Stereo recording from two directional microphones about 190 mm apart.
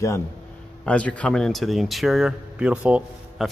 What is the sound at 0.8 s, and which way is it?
Speech, 5° left (ahead or behind).